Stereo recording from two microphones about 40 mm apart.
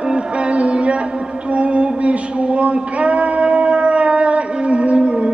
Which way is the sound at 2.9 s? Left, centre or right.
Right.